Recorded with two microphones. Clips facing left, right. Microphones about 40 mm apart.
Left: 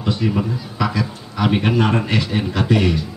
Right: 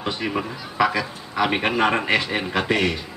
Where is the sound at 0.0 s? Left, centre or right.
Centre.